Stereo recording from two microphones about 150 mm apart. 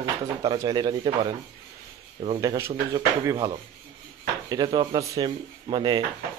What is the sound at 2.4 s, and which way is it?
Speech, 20° right (ahead or behind).